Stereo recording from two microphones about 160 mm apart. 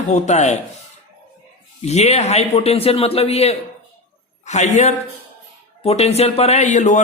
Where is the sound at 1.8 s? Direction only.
45° left (ahead or behind).